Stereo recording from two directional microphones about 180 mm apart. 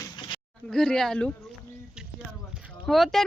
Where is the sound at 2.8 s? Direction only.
Centre (ahead or behind).